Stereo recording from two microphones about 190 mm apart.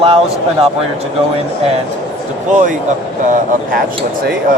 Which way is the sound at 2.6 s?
40° right (ahead or behind).